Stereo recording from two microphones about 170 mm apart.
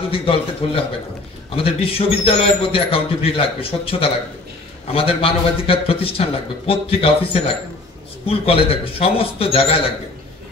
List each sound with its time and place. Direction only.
0.1 s a man's voice: 35° left (ahead or behind)